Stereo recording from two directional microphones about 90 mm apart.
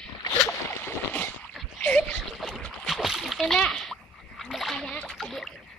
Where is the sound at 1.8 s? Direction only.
15° left (ahead or behind).